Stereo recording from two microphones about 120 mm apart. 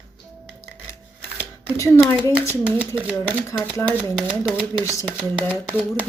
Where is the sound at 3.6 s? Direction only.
15° left (ahead or behind).